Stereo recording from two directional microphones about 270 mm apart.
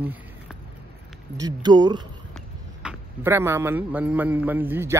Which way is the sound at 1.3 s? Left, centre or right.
Centre.